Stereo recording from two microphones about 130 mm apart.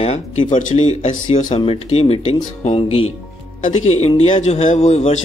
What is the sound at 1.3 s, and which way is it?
Speech, 75° left (ahead or behind).